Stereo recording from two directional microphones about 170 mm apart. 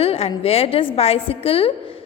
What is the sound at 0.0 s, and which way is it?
A woman's voice, 35° left (ahead or behind).